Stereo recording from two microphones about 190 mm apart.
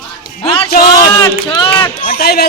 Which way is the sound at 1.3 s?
30° left (ahead or behind).